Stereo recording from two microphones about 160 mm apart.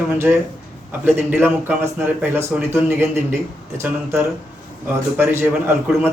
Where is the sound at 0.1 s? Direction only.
10° right (ahead or behind).